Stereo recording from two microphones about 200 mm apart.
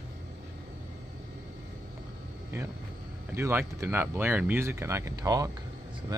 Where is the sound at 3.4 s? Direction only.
10° right (ahead or behind).